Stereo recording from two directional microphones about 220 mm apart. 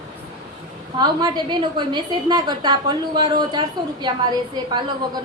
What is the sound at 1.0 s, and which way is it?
A woman's voice, 20° right (ahead or behind).